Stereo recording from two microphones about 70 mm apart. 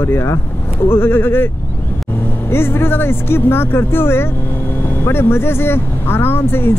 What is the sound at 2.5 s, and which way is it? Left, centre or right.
Speech, left.